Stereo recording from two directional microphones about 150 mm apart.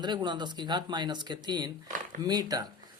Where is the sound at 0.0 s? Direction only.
30° right (ahead or behind).